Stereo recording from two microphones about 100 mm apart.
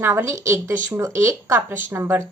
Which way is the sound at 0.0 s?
25° right (ahead or behind).